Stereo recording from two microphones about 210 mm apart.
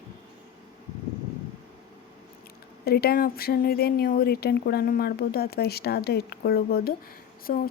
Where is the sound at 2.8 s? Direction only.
45° left (ahead or behind).